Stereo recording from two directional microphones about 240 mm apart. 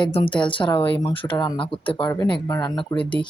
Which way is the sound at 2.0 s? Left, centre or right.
Centre.